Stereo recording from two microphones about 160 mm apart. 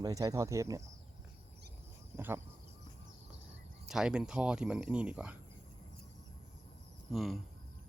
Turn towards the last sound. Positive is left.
turn(degrees=0)  # may be behind; listen again after turning